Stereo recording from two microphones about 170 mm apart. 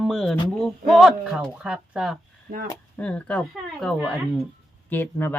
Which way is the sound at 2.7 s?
10° left (ahead or behind).